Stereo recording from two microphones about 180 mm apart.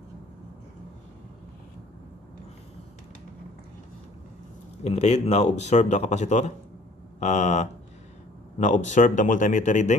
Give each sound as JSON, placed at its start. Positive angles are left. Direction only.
{"t": 4.8, "sound": "speech", "side_deg": 40}